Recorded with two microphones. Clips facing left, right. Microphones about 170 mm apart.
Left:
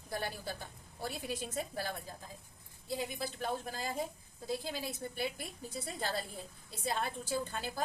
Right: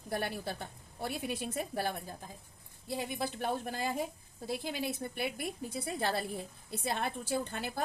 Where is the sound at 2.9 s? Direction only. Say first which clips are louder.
Right 2 dB; 60° right (ahead or behind).